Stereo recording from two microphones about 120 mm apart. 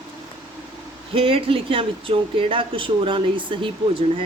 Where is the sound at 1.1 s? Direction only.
50° right (ahead or behind).